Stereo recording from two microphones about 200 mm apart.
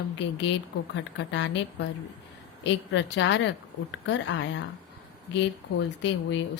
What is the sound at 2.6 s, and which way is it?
A woman's voice, 65° left (ahead or behind).